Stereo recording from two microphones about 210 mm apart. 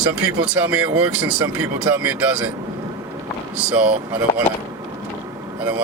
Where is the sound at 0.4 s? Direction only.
5° right (ahead or behind).